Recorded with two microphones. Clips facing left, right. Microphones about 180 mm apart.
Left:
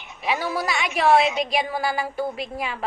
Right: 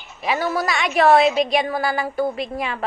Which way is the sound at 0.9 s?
70° right (ahead or behind).